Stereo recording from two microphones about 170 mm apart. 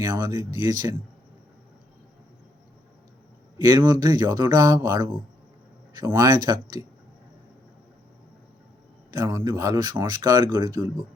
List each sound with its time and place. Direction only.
0.0 s speech: 25° right (ahead or behind)
3.7 s speech: 25° right (ahead or behind)
9.1 s speech: 20° right (ahead or behind)